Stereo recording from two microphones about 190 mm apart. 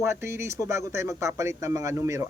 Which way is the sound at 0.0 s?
15° right (ahead or behind).